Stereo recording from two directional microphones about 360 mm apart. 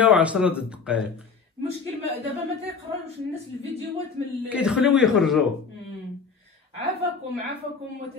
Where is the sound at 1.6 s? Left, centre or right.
Right.